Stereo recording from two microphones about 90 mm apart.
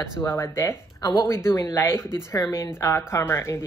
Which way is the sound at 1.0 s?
45° left (ahead or behind).